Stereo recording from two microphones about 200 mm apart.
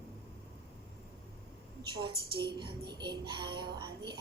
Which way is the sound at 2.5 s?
20° right (ahead or behind).